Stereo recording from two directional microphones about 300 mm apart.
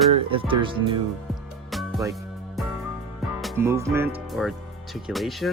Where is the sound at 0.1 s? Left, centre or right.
Centre.